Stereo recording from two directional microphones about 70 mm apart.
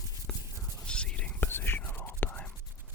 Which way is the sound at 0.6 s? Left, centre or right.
Centre.